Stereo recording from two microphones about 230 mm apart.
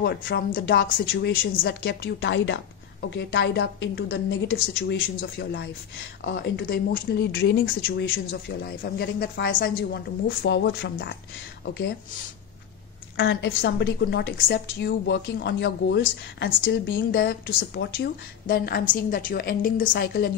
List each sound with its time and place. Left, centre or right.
0.0 s a woman's voice: left
8.6 s a woman's voice: left
10.2 s a woman's voice: left
13.1 s a woman's voice: left